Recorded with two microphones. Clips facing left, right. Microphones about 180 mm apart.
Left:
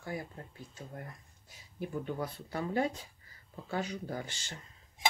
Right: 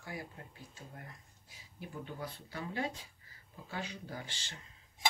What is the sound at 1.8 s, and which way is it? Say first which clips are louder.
Speech: left 7 dB; 50° left (ahead or behind).